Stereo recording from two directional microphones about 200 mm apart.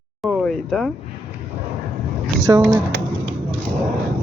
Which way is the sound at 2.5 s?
15° right (ahead or behind).